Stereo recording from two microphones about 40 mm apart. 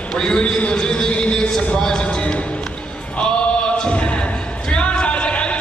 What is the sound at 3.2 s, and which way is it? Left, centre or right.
Choir, left.